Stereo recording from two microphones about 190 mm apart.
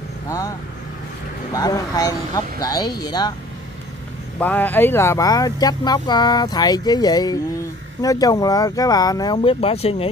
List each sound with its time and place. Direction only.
0.3 s speech: 15° left (ahead or behind)
4.4 s speech: 10° left (ahead or behind); by 10.0 s 30° left (ahead or behind)